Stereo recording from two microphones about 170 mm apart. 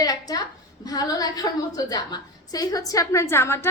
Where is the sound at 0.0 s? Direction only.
20° left (ahead or behind).